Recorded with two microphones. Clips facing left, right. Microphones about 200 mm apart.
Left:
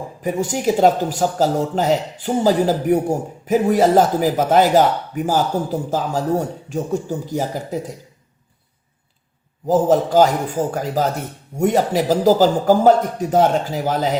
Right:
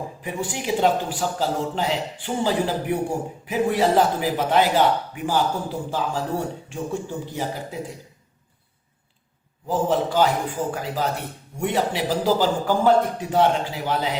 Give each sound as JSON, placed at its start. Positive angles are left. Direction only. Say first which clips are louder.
{"t": 0.2, "sound": "speech", "louder": "left 10 dB", "side_deg": 40}
{"t": 9.6, "sound": "a man's voice", "louder": "left 7 dB", "side_deg": 40}